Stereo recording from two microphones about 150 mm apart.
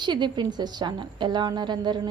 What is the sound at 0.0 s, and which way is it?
A woman's voice, 30° right (ahead or behind).